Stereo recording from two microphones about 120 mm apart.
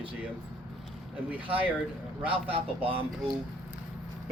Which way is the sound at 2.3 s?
50° right (ahead or behind).